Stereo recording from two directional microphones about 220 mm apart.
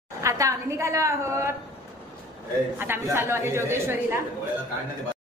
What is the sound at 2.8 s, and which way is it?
Speech, 10° right (ahead or behind).